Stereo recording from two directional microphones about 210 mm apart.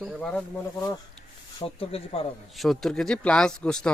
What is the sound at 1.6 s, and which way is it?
Speech, 25° left (ahead or behind).